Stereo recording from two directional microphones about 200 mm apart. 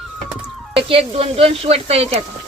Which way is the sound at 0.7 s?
30° right (ahead or behind).